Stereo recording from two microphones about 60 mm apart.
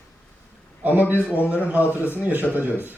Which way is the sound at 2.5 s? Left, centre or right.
Right.